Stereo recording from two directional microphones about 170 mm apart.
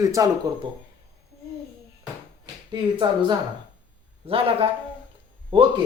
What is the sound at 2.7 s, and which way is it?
A man's voice, 25° right (ahead or behind).